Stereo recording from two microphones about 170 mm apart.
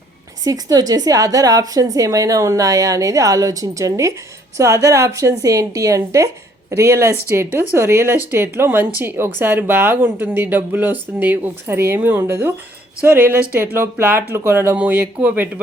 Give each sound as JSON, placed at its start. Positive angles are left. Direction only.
{"t": 0.4, "sound": "a woman's voice", "side_deg": -20}